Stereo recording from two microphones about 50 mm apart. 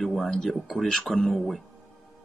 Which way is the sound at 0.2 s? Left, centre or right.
Centre.